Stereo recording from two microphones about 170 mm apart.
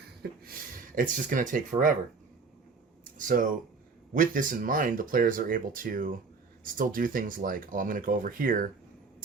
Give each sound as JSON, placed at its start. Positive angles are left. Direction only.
{"t": 0.2, "sound": "speech", "side_deg": -60}
{"t": 3.0, "sound": "a sound", "side_deg": -50}
{"t": 4.1, "sound": "speech", "side_deg": -50}